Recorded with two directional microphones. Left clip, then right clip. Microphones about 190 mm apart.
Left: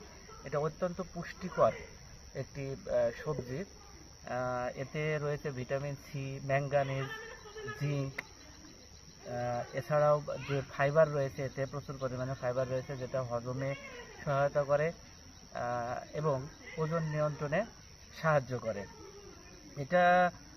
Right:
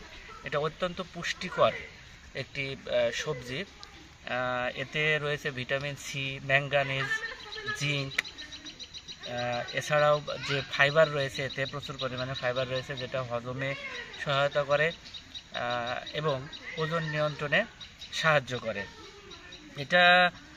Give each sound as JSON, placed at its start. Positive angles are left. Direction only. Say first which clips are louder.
{"t": 0.4, "sound": "speech", "louder": "right 4 dB", "side_deg": -15}
{"t": 9.3, "sound": "speech", "louder": "right 4 dB", "side_deg": -10}